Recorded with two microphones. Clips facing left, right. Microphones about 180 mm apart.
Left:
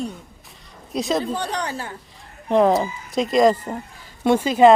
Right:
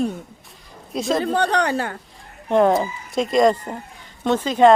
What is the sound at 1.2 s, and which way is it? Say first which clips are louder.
Speech: right 6 dB; 65° right (ahead or behind).